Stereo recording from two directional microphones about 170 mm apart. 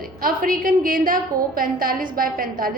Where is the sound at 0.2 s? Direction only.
55° right (ahead or behind).